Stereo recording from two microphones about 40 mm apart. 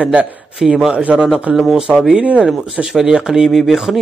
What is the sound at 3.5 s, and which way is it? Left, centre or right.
Speech, centre.